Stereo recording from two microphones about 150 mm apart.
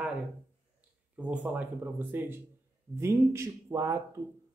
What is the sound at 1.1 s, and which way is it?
Speech, 10° right (ahead or behind).